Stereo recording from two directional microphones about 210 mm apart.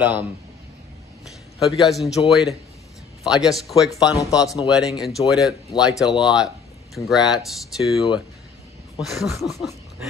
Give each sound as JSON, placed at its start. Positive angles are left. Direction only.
{"t": 1.6, "sound": "speech", "side_deg": 0}
{"t": 4.1, "sound": "speech", "side_deg": 15}
{"t": 4.6, "sound": "speech", "side_deg": 0}